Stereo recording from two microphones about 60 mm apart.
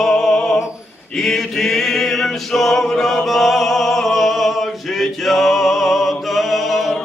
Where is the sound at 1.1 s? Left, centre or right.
Centre.